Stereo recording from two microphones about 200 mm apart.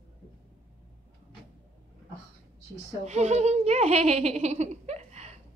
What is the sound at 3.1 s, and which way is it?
Baby laughter, 35° right (ahead or behind).